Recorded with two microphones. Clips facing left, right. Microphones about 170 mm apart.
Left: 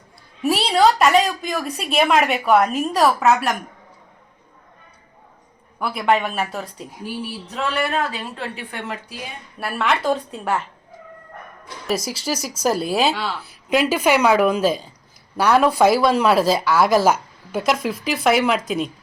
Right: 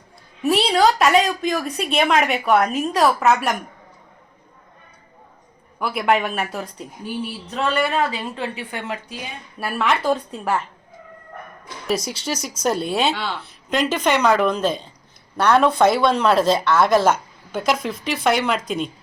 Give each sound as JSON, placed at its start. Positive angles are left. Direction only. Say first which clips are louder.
{"t": 0.4, "sound": "a woman's voice", "louder": "even", "side_deg": 0}
{"t": 5.8, "sound": "a woman's voice", "louder": "even", "side_deg": 0}
{"t": 11.9, "sound": "a woman's voice", "louder": "even", "side_deg": 0}